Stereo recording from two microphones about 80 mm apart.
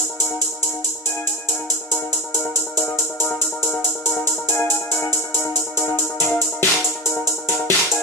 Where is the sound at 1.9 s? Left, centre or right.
Left.